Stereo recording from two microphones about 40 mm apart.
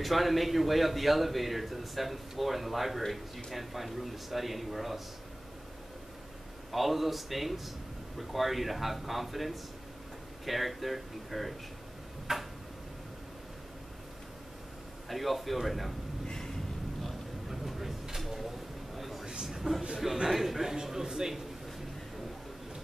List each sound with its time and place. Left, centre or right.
0.0 s a man's voice: centre
6.7 s a man's voice: centre
12.3 s speech: centre
15.0 s a man's voice: centre
16.3 s a sound: centre
17.5 s a sound: centre
20.2 s a man's voice: centre